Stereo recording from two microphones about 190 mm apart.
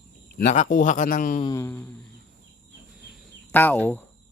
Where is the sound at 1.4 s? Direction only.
15° left (ahead or behind).